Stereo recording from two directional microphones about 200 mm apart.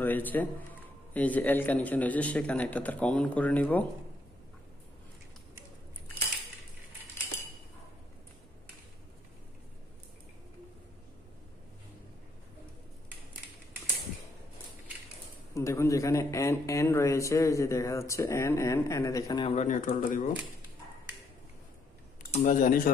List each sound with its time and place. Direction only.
0.0 s speech: 10° left (ahead or behind)
15.5 s speech: 15° left (ahead or behind)
19.4 s speech: 35° left (ahead or behind)
22.3 s speech: 40° left (ahead or behind)